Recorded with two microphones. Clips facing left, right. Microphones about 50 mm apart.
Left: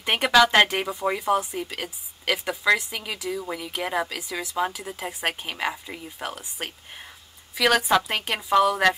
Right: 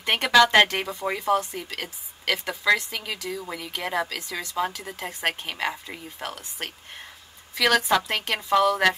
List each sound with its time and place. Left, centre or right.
0.0 s a woman's voice: centre